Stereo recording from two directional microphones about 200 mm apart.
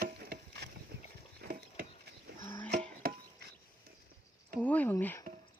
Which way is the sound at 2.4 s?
10° left (ahead or behind).